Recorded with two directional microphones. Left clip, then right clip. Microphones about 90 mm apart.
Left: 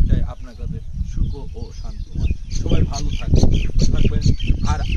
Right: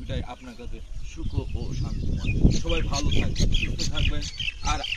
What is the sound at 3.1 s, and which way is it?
Speech, 15° left (ahead or behind).